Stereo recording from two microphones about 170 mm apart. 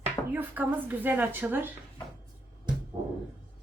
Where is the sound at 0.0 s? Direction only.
10° right (ahead or behind).